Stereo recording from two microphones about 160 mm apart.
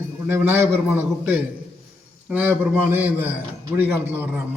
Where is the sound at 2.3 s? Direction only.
10° right (ahead or behind).